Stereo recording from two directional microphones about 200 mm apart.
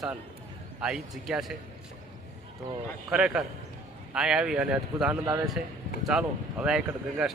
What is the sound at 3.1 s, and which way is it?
A man's voice, 5° right (ahead or behind).